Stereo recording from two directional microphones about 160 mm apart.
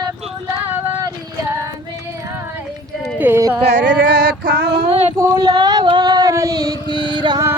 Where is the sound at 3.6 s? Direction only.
90° right.